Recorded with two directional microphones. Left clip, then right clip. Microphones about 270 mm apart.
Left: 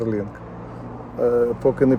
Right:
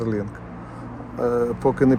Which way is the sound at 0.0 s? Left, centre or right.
Centre.